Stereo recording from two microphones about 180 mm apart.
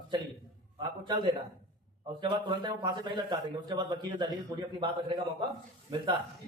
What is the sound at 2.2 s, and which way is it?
A man's voice, 25° right (ahead or behind).